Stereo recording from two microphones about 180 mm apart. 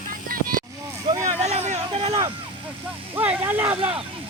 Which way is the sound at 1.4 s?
35° right (ahead or behind).